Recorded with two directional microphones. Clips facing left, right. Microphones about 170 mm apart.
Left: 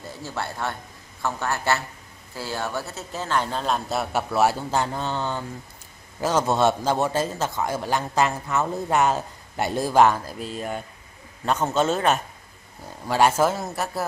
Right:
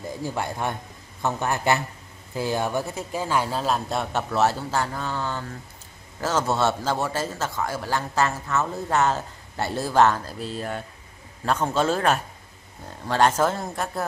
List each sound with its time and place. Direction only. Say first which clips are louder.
0.0 s a man's voice: right 3 dB; 15° right (ahead or behind); by 14.0 s 5° left (ahead or behind)